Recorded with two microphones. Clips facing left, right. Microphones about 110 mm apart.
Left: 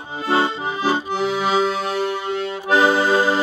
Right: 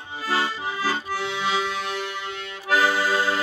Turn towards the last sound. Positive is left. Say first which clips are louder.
# left 6 dB
turn(degrees=25)  # may be behind; listen again after turning